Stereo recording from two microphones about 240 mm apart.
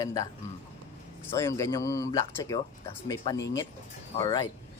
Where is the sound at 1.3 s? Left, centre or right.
Centre.